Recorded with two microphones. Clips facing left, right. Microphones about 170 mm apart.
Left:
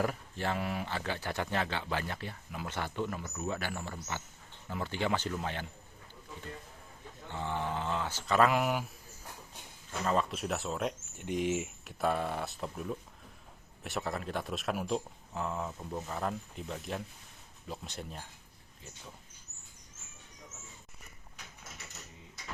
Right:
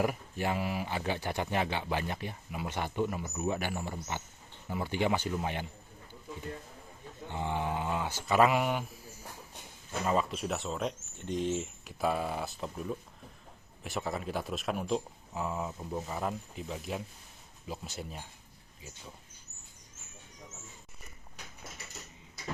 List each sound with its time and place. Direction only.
0.0 s speech: 15° right (ahead or behind)
0.9 s speech: 15° right (ahead or behind)
7.3 s speech: 15° right (ahead or behind)
8.4 s speech: centre (ahead or behind)
10.0 s speech: 5° right (ahead or behind)